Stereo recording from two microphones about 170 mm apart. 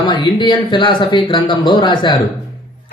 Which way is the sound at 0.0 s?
25° left (ahead or behind).